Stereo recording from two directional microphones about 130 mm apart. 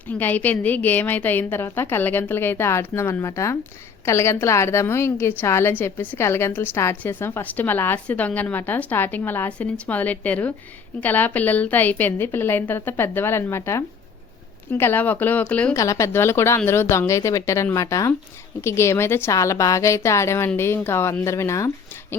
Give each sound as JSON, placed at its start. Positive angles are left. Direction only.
{"t": 0.1, "sound": "a woman's voice", "side_deg": 15}
{"t": 15.7, "sound": "a woman's voice", "side_deg": 25}